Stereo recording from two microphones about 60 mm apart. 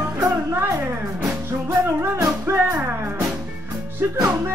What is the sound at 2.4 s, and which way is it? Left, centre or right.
Music, right.